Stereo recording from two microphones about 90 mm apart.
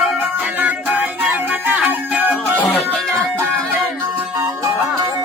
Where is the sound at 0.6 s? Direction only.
20° right (ahead or behind).